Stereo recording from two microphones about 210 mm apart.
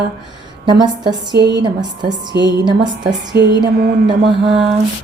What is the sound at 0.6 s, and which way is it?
A woman's voice, 20° right (ahead or behind).